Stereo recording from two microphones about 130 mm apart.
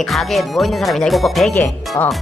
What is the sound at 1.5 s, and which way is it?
Speech, 15° left (ahead or behind).